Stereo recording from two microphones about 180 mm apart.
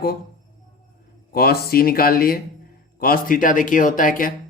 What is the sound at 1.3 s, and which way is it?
Speech, 60° left (ahead or behind).